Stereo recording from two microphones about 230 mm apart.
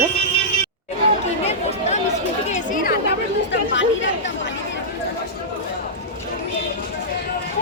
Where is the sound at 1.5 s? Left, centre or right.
Left.